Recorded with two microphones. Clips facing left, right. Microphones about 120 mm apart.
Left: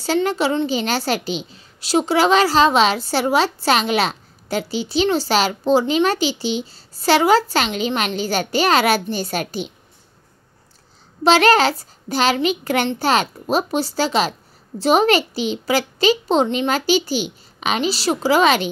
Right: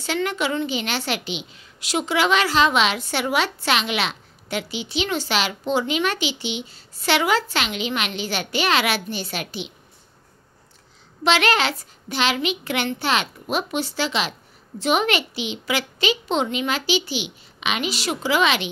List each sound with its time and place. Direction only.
0.0 s a woman's voice: 35° left (ahead or behind)
11.2 s a woman's voice: 40° left (ahead or behind)